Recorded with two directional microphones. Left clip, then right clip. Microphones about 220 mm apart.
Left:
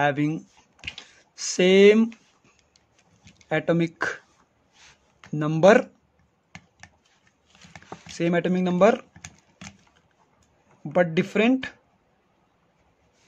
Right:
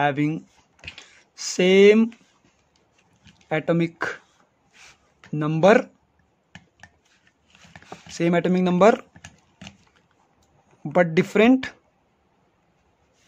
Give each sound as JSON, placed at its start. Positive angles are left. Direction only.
{"t": 0.0, "sound": "speech", "side_deg": -5}
{"t": 3.4, "sound": "speech", "side_deg": -5}
{"t": 5.3, "sound": "speech", "side_deg": -5}
{"t": 6.5, "sound": "finger snapping", "side_deg": 30}
{"t": 7.9, "sound": "speech", "side_deg": -10}
{"t": 9.2, "sound": "a sound", "side_deg": 30}
{"t": 10.8, "sound": "speech", "side_deg": -15}